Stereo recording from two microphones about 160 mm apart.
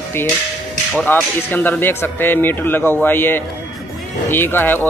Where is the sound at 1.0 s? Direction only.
10° left (ahead or behind).